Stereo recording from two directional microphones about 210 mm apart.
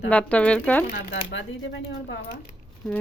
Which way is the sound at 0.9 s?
60° left (ahead or behind).